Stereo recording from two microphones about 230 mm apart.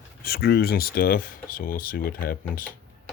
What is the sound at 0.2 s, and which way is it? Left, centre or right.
Speech, left.